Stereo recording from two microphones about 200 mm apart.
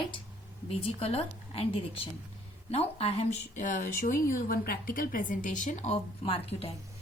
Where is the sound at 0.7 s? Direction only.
30° left (ahead or behind).